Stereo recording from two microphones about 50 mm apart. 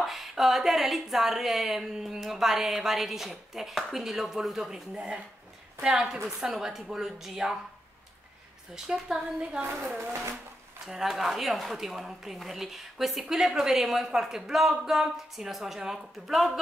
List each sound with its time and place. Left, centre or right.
0.0 s speech: centre
4.9 s speech: right
5.8 s a woman's voice: centre
8.7 s a woman's voice: centre
9.6 s a woman's voice: right
10.9 s speech: centre